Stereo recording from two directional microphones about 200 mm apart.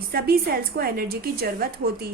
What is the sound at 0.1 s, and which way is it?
A woman's voice, 50° right (ahead or behind).